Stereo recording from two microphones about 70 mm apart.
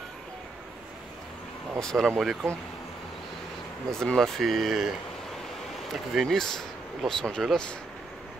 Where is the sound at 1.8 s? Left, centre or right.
Centre.